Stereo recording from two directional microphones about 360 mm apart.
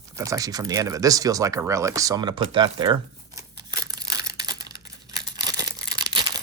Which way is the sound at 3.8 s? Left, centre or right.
Centre.